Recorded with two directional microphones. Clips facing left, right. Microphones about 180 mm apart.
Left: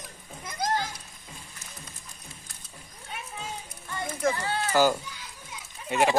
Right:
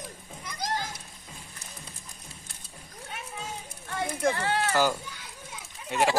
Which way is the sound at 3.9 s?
75° right (ahead or behind).